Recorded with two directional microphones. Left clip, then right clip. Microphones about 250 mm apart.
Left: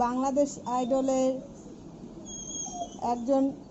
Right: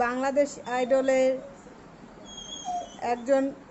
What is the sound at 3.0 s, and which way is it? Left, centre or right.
Speech, right.